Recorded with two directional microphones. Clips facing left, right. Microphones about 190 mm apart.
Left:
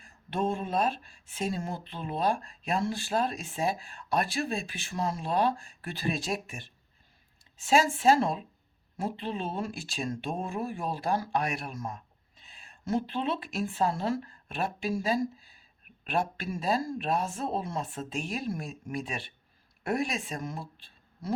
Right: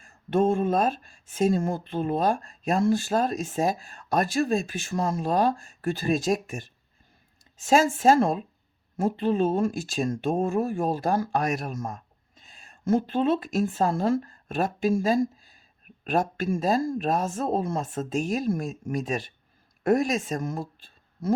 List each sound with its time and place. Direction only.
0.0 s speech: 45° right (ahead or behind)